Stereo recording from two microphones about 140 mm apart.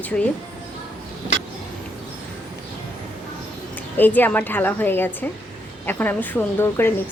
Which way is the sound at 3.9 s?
15° left (ahead or behind).